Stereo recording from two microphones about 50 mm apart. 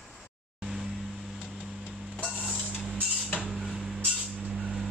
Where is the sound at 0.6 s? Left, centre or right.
Centre.